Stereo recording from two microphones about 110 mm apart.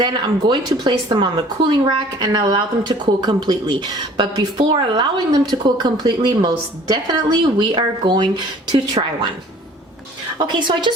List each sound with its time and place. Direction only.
0.0 s a woman's voice: 45° right (ahead or behind)
10.3 s a woman's voice: 40° right (ahead or behind)